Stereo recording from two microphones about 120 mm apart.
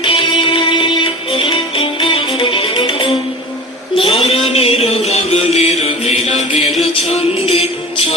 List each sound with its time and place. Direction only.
0.0 s music: 45° left (ahead or behind)
3.9 s music: 55° left (ahead or behind)
6.7 s music: centre (ahead or behind)
7.1 s music: 55° left (ahead or behind)